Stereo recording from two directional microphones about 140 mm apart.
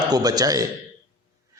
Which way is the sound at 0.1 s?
30° right (ahead or behind).